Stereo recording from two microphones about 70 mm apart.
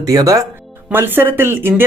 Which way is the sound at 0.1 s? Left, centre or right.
Right.